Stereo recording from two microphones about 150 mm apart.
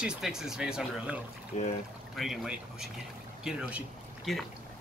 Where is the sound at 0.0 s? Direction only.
5° right (ahead or behind).